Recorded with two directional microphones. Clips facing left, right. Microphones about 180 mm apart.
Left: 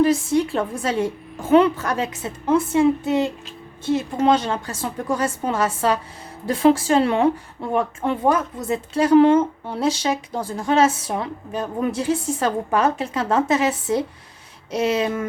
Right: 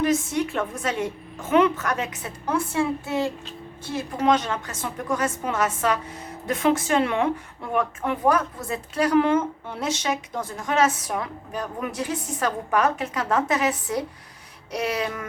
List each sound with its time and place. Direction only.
0.0 s a woman's voice: 30° left (ahead or behind)